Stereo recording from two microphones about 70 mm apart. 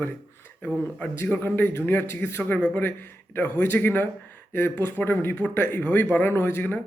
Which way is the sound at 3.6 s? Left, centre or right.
Left.